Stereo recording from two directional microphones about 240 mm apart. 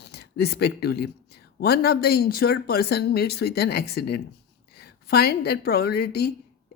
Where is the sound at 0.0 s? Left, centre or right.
Left.